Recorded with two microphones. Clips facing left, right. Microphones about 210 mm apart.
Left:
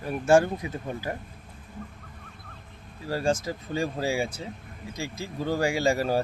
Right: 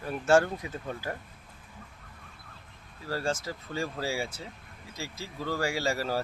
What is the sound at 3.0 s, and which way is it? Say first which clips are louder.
Speech: left 5 dB; 15° left (ahead or behind).